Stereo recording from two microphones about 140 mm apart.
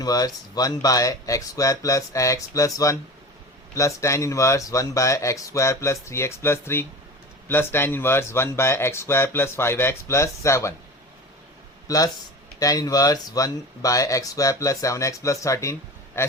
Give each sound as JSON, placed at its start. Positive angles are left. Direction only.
{"t": 0.0, "sound": "speech", "side_deg": 25}
{"t": 11.9, "sound": "speech", "side_deg": 25}